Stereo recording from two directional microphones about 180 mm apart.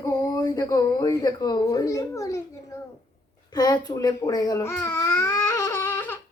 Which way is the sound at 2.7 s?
15° left (ahead or behind).